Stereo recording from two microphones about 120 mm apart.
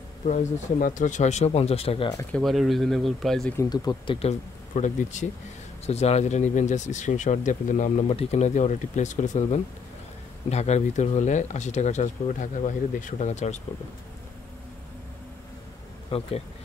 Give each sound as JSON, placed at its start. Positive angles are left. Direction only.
{"t": 0.2, "sound": "speech", "side_deg": 80}
{"t": 2.3, "sound": "speech", "side_deg": 0}
{"t": 3.5, "sound": "speech", "side_deg": 35}
{"t": 4.2, "sound": "speech", "side_deg": 75}
{"t": 5.9, "sound": "speech", "side_deg": 60}
{"t": 10.5, "sound": "speech", "side_deg": 65}
{"t": 16.1, "sound": "speech", "side_deg": 55}